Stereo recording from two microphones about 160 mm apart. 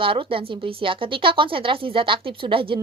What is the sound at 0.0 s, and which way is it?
A woman's voice, 35° right (ahead or behind).